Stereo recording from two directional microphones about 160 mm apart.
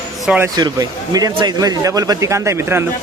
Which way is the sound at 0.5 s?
25° right (ahead or behind).